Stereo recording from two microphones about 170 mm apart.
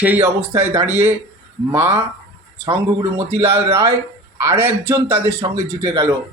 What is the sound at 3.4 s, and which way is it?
Speech, 15° right (ahead or behind).